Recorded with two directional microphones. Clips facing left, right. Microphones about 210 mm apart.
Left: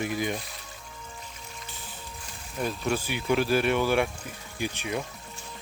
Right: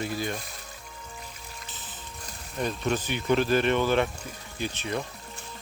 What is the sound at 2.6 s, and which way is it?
Speech, 5° left (ahead or behind).